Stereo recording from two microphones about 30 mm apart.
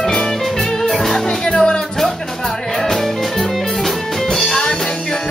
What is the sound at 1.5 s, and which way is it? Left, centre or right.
Music, left.